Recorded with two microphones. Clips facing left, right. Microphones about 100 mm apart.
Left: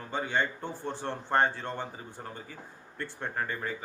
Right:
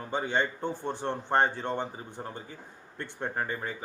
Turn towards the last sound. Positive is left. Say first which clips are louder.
# right 1 dB
turn(degrees=-20)  # may be behind; listen again after turning